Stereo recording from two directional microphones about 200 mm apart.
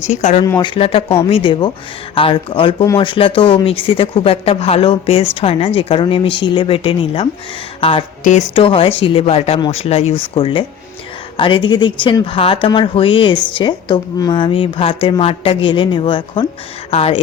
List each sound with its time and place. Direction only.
0.1 s speech: 35° left (ahead or behind)
0.4 s speech: 20° left (ahead or behind)